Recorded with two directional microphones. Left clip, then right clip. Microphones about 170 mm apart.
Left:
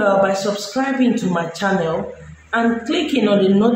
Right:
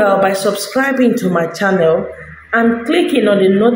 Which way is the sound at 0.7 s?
20° right (ahead or behind).